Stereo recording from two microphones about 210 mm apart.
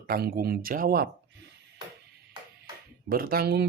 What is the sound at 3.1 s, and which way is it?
Speech, 45° right (ahead or behind).